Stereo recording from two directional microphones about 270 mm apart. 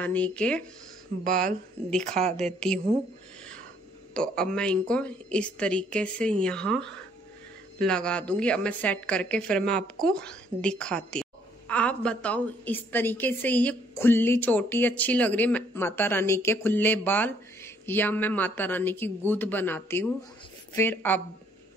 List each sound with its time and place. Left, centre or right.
0.0 s a woman's voice: centre
2.0 s a woman's voice: right
2.3 s a woman's voice: centre
4.1 s a woman's voice: centre